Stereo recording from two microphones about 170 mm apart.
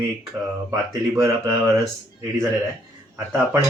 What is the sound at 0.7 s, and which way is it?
Speech, 20° right (ahead or behind).